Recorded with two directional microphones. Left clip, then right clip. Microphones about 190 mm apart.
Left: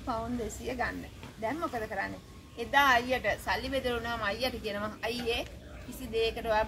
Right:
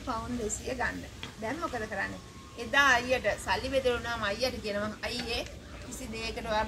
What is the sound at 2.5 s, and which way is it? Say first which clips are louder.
A woman's voice: even; 40° left (ahead or behind).